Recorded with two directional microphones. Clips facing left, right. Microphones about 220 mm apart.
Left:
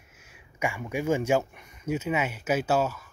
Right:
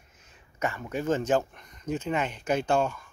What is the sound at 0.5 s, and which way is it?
Speech, 10° left (ahead or behind).